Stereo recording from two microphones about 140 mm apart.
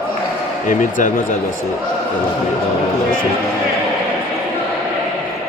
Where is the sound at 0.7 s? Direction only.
70° left (ahead or behind).